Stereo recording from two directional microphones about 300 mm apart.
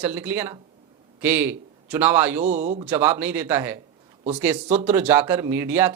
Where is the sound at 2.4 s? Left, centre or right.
Right.